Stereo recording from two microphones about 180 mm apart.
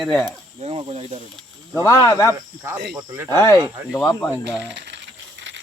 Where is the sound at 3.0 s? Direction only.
15° right (ahead or behind).